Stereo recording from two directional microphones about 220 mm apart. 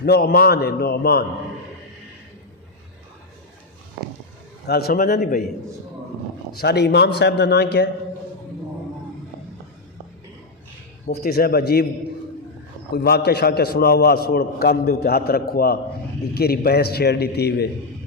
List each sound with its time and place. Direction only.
0.0 s a man's voice: 45° left (ahead or behind)
4.6 s a man's voice: 45° left (ahead or behind)
6.6 s a man's voice: 50° left (ahead or behind)
11.0 s a man's voice: 45° left (ahead or behind)
12.9 s a man's voice: 45° left (ahead or behind)